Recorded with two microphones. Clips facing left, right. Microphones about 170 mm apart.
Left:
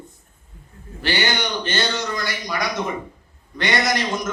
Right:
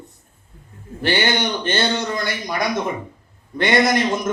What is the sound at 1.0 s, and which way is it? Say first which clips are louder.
A man's voice: right 3 dB; 55° right (ahead or behind).